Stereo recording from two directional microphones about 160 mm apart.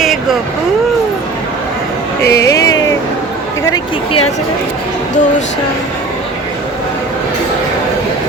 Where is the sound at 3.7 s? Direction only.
35° left (ahead or behind).